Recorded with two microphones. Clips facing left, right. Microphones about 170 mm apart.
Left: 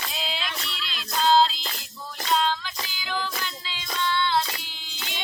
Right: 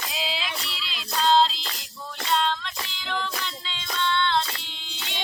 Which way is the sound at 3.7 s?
5° left (ahead or behind).